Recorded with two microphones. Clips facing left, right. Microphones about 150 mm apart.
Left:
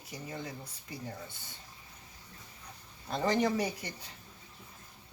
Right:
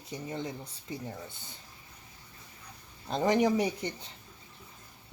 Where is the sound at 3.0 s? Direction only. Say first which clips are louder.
Right 3 dB; 20° right (ahead or behind).